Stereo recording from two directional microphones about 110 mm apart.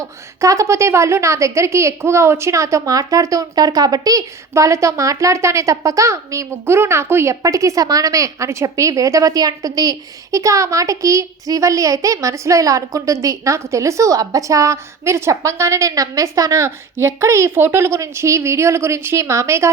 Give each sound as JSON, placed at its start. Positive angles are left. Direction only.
{"t": 0.0, "sound": "a woman's voice", "side_deg": -30}